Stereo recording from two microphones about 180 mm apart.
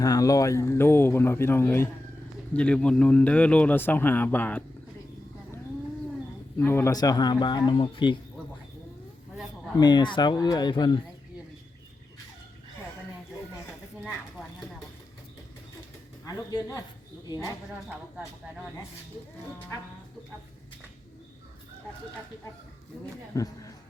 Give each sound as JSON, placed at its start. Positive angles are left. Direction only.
{"t": 0.0, "sound": "speech", "side_deg": 20}
{"t": 6.6, "sound": "a man's voice", "side_deg": 10}
{"t": 9.8, "sound": "a man's voice", "side_deg": 25}
{"t": 16.2, "sound": "a man's voice", "side_deg": 20}
{"t": 23.3, "sound": "speech", "side_deg": 20}